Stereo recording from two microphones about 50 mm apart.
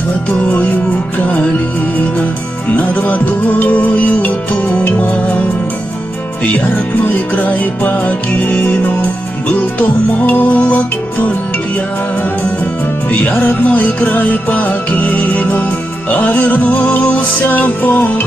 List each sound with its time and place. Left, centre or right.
0.3 s music: left
2.7 s music: left
7.1 s music: left
12.8 s music: left